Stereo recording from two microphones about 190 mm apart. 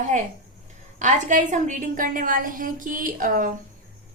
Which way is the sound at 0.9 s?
40° right (ahead or behind).